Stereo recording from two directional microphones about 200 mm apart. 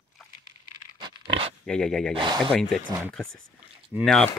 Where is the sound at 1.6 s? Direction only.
5° left (ahead or behind).